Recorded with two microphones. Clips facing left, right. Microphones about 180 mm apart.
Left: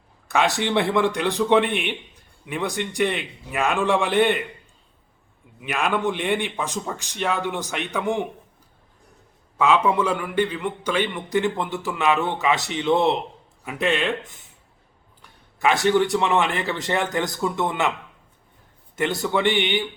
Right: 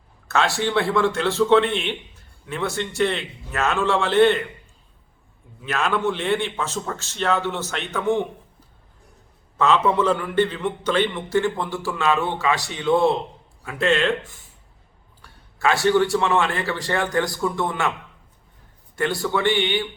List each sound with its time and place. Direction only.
0.3 s a man's voice: 15° left (ahead or behind)
5.5 s a man's voice: 15° left (ahead or behind)
9.6 s a man's voice: 10° left (ahead or behind)
18.9 s a man's voice: 20° left (ahead or behind)